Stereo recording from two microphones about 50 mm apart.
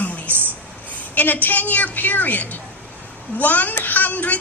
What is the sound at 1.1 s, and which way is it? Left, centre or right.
A woman's voice, left.